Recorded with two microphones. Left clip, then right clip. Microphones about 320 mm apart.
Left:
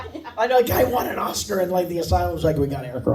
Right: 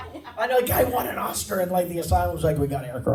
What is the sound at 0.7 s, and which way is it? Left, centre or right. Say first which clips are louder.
A man's voice: left 2 dB; centre.